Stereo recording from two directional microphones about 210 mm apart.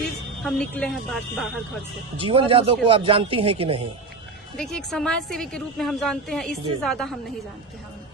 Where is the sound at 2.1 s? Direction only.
25° right (ahead or behind).